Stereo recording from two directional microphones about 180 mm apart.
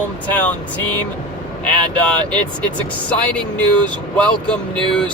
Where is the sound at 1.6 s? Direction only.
5° left (ahead or behind).